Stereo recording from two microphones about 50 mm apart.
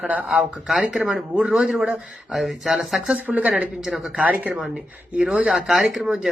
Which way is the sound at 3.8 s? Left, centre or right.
Centre.